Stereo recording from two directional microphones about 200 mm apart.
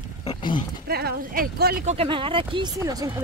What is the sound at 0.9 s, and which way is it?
Speech, 50° right (ahead or behind).